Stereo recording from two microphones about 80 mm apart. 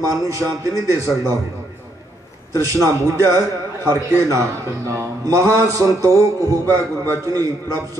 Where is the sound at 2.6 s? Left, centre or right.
Right.